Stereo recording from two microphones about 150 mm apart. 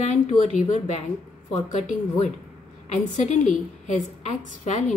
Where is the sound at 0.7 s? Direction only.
50° left (ahead or behind).